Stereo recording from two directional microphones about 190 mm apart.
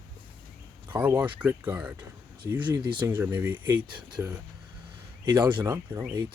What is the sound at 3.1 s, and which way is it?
Speech, 10° right (ahead or behind).